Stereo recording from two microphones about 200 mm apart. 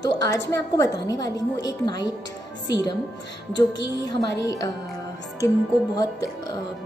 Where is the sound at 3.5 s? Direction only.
20° left (ahead or behind).